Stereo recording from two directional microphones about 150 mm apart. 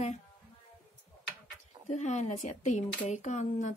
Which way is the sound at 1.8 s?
50° left (ahead or behind).